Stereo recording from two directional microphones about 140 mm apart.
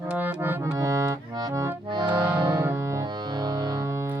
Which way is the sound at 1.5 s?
25° right (ahead or behind).